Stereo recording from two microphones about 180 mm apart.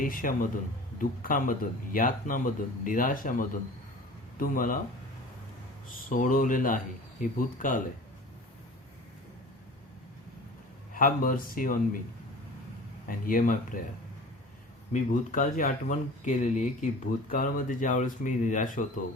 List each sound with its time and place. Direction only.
0.0 s speech: 50° left (ahead or behind)
6.1 s speech: 50° left (ahead or behind)
10.9 s speech: 50° left (ahead or behind)
13.1 s speech: 50° left (ahead or behind)
14.9 s speech: 45° left (ahead or behind)